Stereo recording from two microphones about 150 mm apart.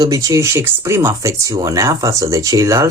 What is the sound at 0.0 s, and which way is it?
Speech, 25° right (ahead or behind).